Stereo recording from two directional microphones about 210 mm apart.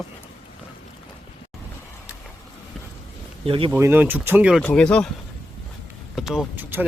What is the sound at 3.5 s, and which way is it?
Speech, 25° right (ahead or behind).